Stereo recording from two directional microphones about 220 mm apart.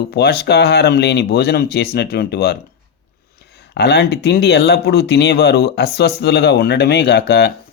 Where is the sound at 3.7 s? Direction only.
50° left (ahead or behind).